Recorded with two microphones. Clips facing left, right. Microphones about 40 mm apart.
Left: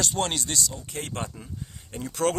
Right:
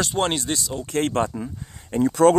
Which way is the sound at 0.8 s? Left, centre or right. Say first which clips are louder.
Right 12 dB; right.